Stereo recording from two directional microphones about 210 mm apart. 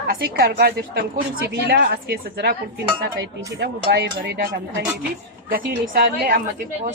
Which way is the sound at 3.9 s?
50° right (ahead or behind).